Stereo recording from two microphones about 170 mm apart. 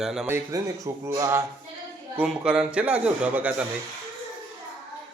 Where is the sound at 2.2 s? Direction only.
5° right (ahead or behind).